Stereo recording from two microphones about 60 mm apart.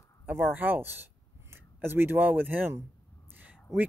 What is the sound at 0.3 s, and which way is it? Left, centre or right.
Speech, right.